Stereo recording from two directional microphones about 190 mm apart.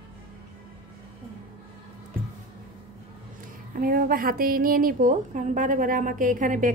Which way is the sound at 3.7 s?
50° right (ahead or behind).